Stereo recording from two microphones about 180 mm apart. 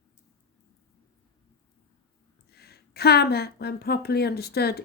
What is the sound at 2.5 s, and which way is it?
Speech, 60° left (ahead or behind).